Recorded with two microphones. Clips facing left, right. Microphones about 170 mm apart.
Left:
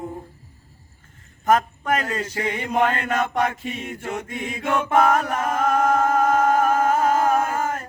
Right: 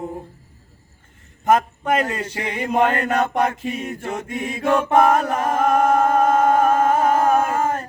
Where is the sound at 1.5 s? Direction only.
25° right (ahead or behind).